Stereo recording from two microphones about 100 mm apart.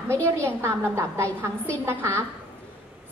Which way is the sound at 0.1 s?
25° right (ahead or behind).